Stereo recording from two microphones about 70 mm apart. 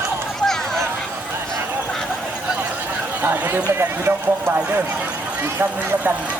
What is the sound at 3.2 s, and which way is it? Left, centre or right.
Speech, right.